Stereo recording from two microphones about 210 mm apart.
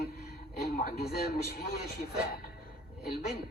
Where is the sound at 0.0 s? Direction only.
50° left (ahead or behind).